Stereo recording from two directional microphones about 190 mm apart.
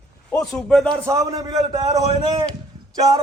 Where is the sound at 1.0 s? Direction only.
15° right (ahead or behind).